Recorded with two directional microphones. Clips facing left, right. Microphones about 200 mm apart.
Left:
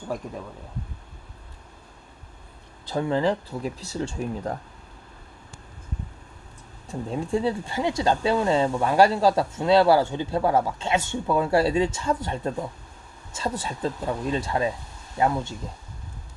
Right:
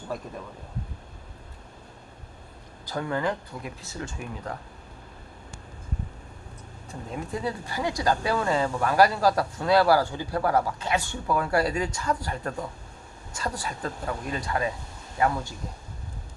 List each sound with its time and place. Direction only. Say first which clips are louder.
2.8 s speech: left 5 dB; 25° left (ahead or behind)
7.1 s speech: left 6 dB; 30° left (ahead or behind)